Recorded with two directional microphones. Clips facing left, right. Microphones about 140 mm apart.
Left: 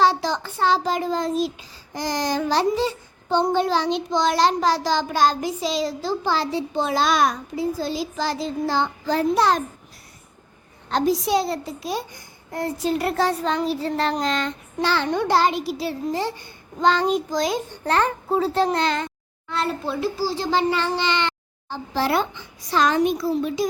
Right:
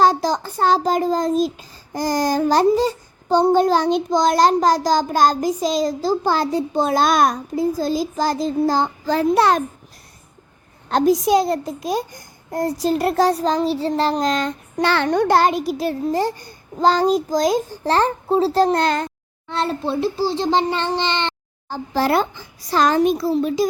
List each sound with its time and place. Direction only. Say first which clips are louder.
0.0 s child singing: right 3 dB; 40° right (ahead or behind)
2.6 s a child's voice: right 5 dB; 40° right (ahead or behind)
9.3 s a child's voice: right 4 dB; 55° right (ahead or behind)
10.8 s a child's voice: right 5 dB; 45° right (ahead or behind)
14.8 s a child's voice: right 4 dB; 60° right (ahead or behind)
19.5 s a child's voice: right 3 dB; 30° right (ahead or behind)
21.7 s a child's voice: right 4 dB; 45° right (ahead or behind)